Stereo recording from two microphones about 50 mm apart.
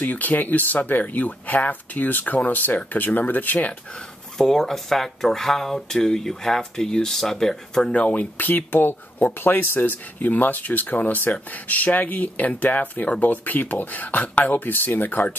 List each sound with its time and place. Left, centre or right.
0.0 s speech: left
4.4 s speech: centre
7.9 s speech: left